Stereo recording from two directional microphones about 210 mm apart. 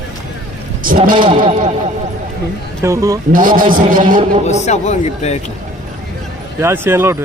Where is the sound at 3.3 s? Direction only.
40° right (ahead or behind).